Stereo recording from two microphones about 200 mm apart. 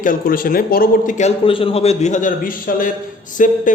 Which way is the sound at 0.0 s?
45° left (ahead or behind).